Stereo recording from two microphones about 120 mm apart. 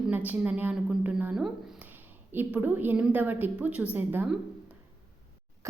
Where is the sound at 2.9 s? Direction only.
15° right (ahead or behind).